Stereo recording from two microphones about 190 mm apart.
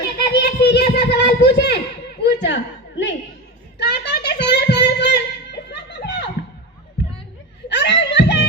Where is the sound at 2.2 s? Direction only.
65° left (ahead or behind).